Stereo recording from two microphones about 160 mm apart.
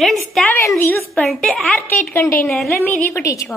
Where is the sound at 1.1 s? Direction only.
5° left (ahead or behind).